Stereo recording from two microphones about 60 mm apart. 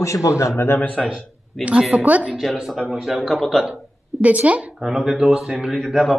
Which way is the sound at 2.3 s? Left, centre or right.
Centre.